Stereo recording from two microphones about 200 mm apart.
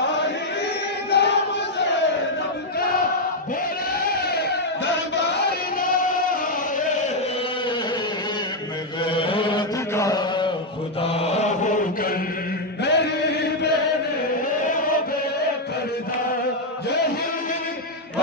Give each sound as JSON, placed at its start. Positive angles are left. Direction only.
{"t": 1.1, "sound": "choir", "side_deg": 55}
{"t": 4.1, "sound": "a sound", "side_deg": 55}
{"t": 9.0, "sound": "chant", "side_deg": 25}
{"t": 11.0, "sound": "mantra", "side_deg": 30}
{"t": 12.8, "sound": "chant", "side_deg": 60}